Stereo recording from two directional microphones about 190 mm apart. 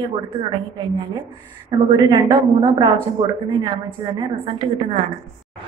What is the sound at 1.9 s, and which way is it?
A woman's voice, 20° right (ahead or behind).